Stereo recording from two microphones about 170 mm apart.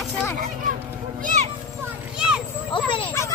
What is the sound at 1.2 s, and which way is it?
Children playing, 45° right (ahead or behind).